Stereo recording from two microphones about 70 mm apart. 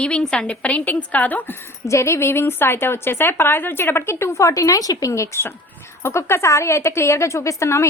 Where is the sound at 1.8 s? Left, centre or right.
Left.